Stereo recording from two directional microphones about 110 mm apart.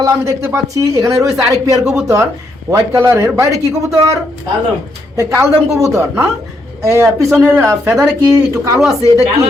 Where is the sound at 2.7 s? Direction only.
25° right (ahead or behind).